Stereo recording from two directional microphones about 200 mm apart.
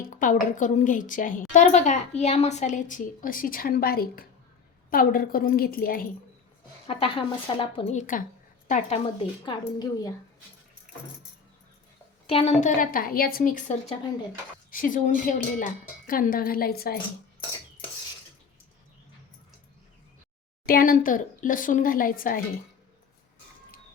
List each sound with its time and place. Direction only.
0.1 s a woman's voice: 40° left (ahead or behind)
6.8 s a woman's voice: 25° left (ahead or behind)
9.4 s a woman's voice: 20° left (ahead or behind)
12.3 s a woman's voice: 30° left (ahead or behind); by 17.0 s 50° left (ahead or behind)
20.7 s speech: 45° left (ahead or behind)